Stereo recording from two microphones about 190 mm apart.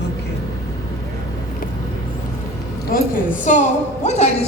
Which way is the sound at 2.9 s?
50° left (ahead or behind).